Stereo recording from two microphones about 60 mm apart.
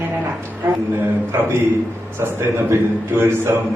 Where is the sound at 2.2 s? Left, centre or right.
Right.